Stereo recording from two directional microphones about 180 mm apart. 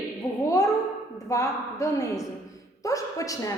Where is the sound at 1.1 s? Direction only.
20° left (ahead or behind).